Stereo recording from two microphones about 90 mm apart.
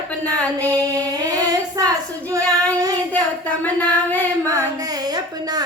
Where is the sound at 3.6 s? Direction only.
20° left (ahead or behind).